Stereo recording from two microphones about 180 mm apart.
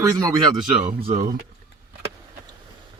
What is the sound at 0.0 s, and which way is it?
Speech, 20° right (ahead or behind).